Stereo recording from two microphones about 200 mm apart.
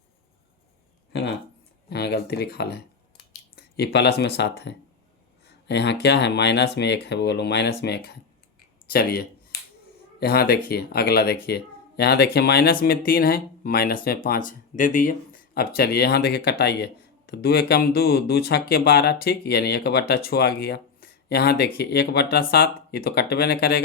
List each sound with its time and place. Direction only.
1.9 s scissors: 55° left (ahead or behind)
5.6 s speech: 60° left (ahead or behind)